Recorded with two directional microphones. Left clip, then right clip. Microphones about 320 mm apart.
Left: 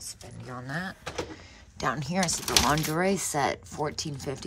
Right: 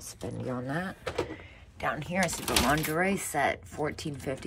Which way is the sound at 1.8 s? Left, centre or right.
Centre.